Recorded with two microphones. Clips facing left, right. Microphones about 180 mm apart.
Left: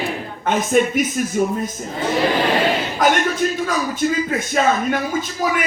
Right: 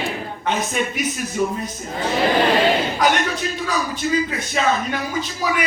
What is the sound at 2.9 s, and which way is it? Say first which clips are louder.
Speech: left 2 dB; 45° left (ahead or behind).